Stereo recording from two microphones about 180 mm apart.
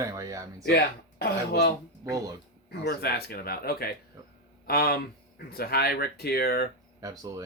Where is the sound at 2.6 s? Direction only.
60° left (ahead or behind).